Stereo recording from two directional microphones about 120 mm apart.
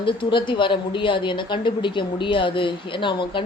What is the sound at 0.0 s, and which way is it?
Speech, 45° left (ahead or behind).